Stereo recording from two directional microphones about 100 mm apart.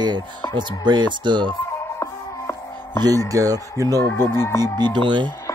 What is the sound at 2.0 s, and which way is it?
Music, 25° left (ahead or behind).